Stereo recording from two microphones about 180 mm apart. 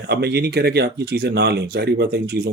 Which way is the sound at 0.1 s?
65° right (ahead or behind).